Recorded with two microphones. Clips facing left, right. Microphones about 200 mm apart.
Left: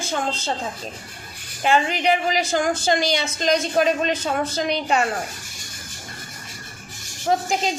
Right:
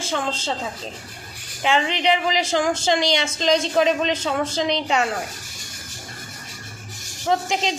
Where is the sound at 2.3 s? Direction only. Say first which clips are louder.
Even; 25° right (ahead or behind).